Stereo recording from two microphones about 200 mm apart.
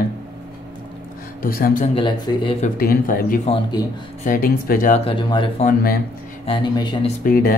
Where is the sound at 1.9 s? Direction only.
25° left (ahead or behind).